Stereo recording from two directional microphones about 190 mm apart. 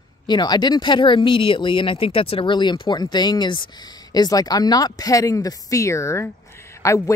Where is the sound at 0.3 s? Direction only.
20° left (ahead or behind).